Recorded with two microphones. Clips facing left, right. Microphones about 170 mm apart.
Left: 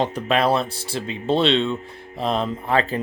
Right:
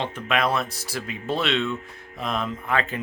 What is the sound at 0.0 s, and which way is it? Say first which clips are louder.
Speech: left 5 dB; 35° left (ahead or behind).